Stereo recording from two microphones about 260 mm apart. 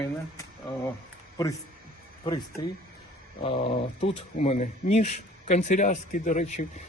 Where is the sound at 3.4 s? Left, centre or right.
Left.